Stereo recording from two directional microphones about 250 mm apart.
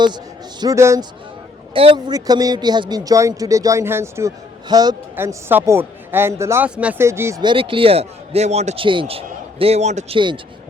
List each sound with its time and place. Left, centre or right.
0.6 s speech: centre